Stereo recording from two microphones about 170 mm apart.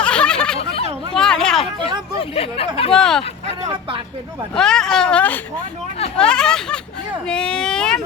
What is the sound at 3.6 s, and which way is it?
Speech, 30° right (ahead or behind).